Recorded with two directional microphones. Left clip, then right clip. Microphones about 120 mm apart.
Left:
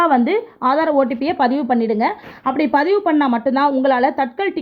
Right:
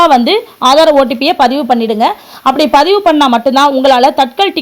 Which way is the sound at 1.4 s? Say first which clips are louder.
Right 6 dB; 20° right (ahead or behind).